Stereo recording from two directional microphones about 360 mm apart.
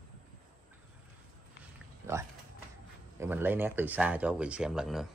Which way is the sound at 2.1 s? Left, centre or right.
Centre.